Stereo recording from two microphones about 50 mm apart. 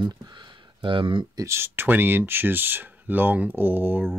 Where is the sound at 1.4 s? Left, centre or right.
Right.